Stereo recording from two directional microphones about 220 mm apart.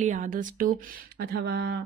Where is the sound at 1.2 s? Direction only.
45° right (ahead or behind).